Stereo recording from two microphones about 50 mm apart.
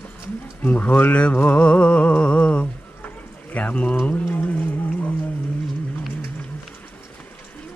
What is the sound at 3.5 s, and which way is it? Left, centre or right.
Speech, left.